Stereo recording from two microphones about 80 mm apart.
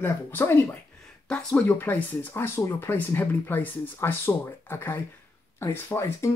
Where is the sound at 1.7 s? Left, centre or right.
Left.